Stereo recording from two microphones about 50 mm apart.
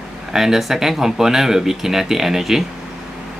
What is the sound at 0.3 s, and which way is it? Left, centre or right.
Speech, centre.